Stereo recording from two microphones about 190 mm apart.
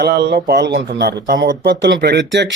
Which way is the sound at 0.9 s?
50° right (ahead or behind).